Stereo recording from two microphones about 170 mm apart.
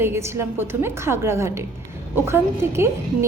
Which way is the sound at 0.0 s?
15° right (ahead or behind).